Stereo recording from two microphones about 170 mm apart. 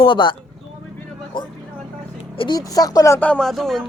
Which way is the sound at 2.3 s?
25° left (ahead or behind).